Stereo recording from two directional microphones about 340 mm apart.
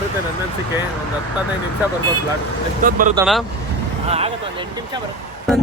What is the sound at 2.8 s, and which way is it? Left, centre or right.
Speech, right.